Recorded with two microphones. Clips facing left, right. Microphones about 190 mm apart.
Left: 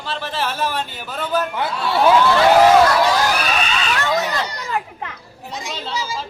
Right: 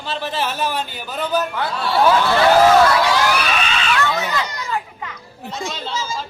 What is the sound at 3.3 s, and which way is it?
Crowd, 40° left (ahead or behind).